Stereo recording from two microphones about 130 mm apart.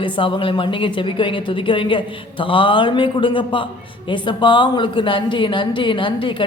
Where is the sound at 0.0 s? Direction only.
40° left (ahead or behind).